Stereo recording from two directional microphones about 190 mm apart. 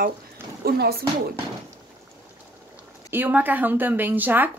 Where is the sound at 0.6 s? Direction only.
55° right (ahead or behind).